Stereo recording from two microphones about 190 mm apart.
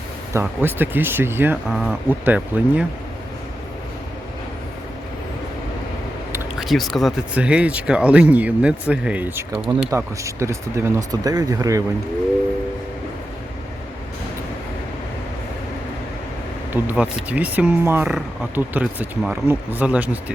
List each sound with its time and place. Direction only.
0.3 s speech: 10° right (ahead or behind)
6.6 s speech: centre (ahead or behind); by 11.8 s 20° right (ahead or behind)
16.7 s speech: 10° right (ahead or behind)